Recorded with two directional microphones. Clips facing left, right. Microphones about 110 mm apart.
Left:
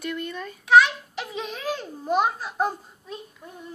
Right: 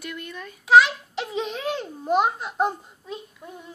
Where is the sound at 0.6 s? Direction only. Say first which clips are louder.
Right 1 dB; 30° right (ahead or behind).